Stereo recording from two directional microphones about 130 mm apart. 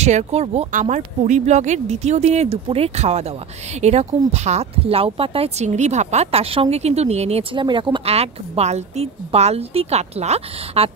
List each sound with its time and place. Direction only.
0.0 s a woman's voice: 60° right (ahead or behind)
0.7 s speech: 70° right (ahead or behind); by 7.4 s 55° right (ahead or behind)
7.5 s a woman's voice: 35° right (ahead or behind); by 10.9 s 55° right (ahead or behind)